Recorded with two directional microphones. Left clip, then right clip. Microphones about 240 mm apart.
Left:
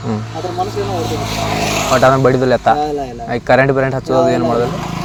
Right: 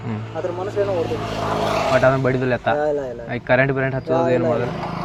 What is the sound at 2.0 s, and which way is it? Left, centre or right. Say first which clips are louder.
Speech: left 7 dB; left.